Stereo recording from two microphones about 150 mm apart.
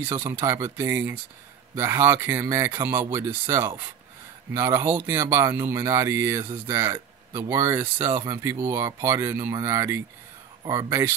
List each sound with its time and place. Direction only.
0.1 s speech: 15° right (ahead or behind)